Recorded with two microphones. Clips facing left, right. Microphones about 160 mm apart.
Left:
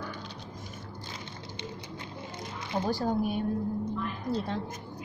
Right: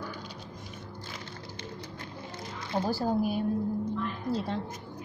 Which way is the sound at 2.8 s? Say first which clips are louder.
Right 1 dB; 5° right (ahead or behind).